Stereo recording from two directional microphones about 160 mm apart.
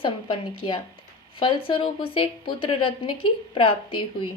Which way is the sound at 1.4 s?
35° left (ahead or behind).